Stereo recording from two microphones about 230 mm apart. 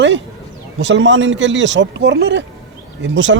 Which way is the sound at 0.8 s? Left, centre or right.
Right.